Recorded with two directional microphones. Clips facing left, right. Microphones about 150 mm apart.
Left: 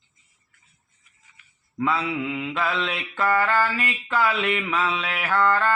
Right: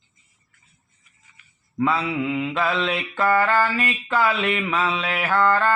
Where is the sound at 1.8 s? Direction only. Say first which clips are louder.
Right 2 dB; 35° right (ahead or behind).